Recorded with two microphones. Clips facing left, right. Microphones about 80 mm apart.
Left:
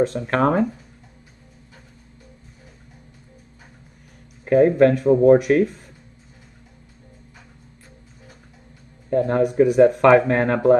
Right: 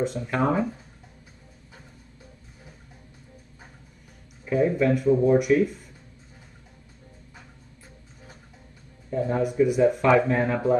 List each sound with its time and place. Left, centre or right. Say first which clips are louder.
0.0 s speech: left 6 dB; left
4.5 s speech: left 7 dB; left
9.1 s speech: left 6 dB; left